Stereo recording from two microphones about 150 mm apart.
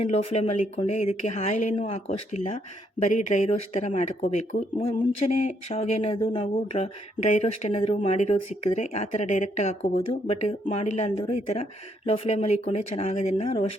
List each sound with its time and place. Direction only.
0.0 s speech: 45° left (ahead or behind)